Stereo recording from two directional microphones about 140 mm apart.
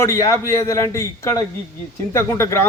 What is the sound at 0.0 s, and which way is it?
A man's voice, 20° left (ahead or behind).